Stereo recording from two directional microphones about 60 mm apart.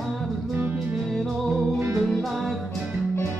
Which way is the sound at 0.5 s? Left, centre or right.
Right.